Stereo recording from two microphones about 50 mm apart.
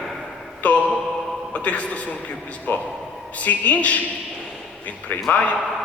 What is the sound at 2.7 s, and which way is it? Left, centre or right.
A man's voice, left.